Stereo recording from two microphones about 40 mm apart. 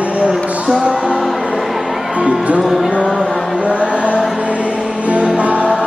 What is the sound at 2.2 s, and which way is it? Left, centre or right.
Music, right.